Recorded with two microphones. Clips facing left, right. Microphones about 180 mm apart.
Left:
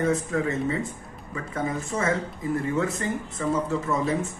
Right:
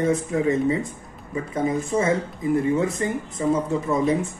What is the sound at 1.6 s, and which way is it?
Speech, 20° right (ahead or behind).